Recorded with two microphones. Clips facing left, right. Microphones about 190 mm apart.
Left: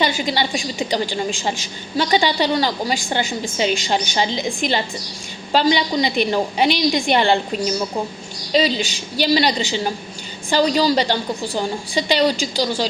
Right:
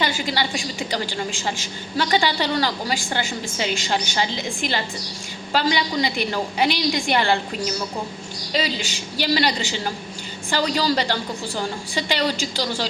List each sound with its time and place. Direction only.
0.0 s a woman's voice: 20° left (ahead or behind)